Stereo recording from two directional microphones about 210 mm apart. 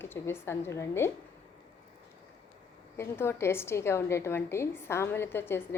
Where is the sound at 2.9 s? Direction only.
10° left (ahead or behind).